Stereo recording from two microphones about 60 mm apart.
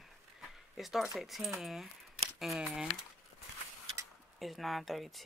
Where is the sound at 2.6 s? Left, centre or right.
Centre.